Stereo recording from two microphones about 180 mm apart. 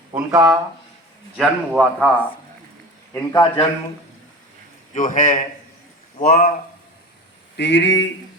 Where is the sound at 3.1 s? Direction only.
25° left (ahead or behind).